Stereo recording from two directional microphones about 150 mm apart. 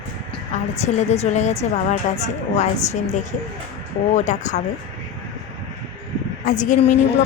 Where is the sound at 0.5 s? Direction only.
55° left (ahead or behind).